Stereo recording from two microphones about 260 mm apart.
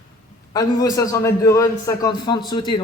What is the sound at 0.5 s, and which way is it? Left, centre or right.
A man's voice, centre.